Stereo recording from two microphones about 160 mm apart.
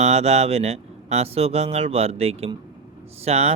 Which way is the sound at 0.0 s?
40° right (ahead or behind).